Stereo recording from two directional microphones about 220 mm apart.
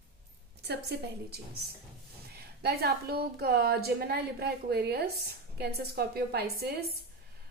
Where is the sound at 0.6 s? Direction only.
45° right (ahead or behind).